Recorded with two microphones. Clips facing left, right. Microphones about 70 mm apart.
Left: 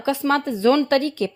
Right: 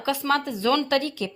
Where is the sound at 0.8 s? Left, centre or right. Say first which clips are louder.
Left 5 dB; left.